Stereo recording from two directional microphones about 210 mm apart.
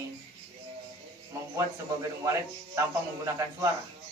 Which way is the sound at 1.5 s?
15° right (ahead or behind).